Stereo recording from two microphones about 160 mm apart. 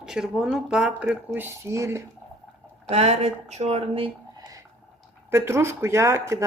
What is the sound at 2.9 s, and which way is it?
Speech, 40° right (ahead or behind).